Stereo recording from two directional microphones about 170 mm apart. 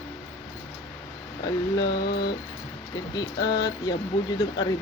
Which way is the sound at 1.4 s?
20° left (ahead or behind).